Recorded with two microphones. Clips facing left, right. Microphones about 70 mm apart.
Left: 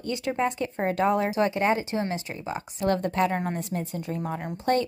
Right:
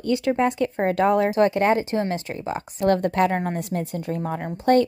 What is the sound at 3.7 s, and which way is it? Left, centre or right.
Speech, right.